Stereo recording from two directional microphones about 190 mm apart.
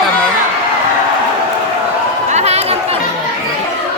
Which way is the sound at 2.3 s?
35° right (ahead or behind).